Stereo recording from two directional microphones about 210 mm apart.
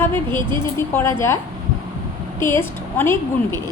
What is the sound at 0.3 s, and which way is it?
Speech, 20° right (ahead or behind).